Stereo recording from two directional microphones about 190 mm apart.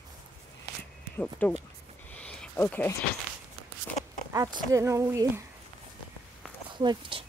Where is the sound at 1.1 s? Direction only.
10° left (ahead or behind).